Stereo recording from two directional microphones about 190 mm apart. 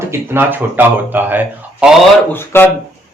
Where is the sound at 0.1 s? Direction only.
10° right (ahead or behind).